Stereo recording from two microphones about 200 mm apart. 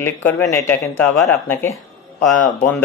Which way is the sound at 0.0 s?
15° left (ahead or behind).